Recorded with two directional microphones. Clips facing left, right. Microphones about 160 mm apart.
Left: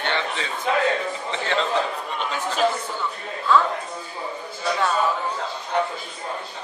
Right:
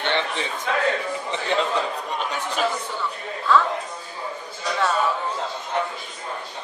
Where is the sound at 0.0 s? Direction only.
20° right (ahead or behind).